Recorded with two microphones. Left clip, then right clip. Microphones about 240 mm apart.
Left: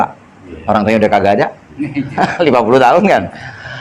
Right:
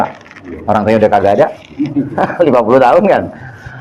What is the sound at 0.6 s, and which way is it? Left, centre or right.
Speech, left.